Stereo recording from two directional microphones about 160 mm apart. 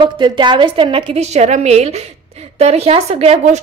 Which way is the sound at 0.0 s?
30° right (ahead or behind).